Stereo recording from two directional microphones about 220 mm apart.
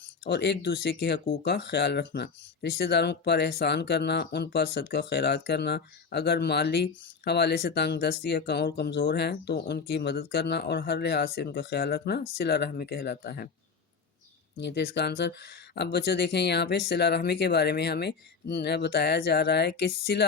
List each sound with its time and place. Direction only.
0.3 s speech: 50° left (ahead or behind)
14.6 s speech: 50° left (ahead or behind)